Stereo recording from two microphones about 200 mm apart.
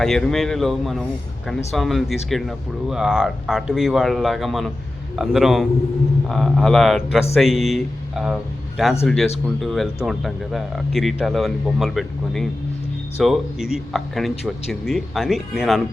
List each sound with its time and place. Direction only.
0.0 s speech: centre (ahead or behind)